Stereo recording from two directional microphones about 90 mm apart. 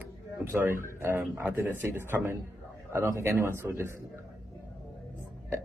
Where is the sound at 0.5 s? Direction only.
25° right (ahead or behind).